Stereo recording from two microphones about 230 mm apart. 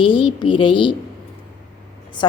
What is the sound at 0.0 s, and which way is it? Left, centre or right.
Speech, left.